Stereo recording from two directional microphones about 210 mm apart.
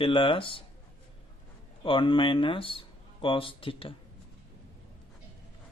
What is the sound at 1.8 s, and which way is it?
Speech, 25° left (ahead or behind).